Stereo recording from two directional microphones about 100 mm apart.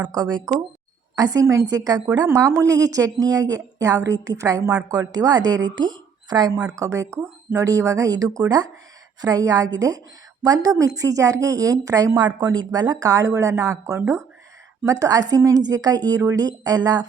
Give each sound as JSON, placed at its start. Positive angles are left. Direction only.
{"t": 0.0, "sound": "speech", "side_deg": -45}
{"t": 6.7, "sound": "speech", "side_deg": -35}